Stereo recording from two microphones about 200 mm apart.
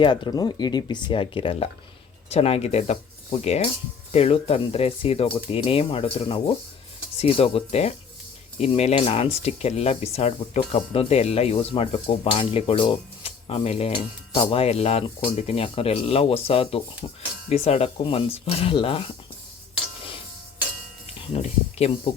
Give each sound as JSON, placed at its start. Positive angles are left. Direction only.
{"t": 0.0, "sound": "speech", "side_deg": 25}
{"t": 21.3, "sound": "speech", "side_deg": 30}